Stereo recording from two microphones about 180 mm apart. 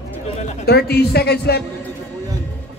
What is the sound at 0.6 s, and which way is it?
A woman's voice, 60° left (ahead or behind).